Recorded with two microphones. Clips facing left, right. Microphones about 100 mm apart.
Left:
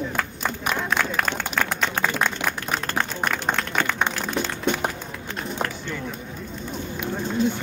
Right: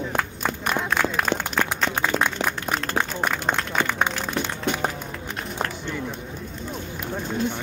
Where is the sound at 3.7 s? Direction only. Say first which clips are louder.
Right 1 dB; centre (ahead or behind).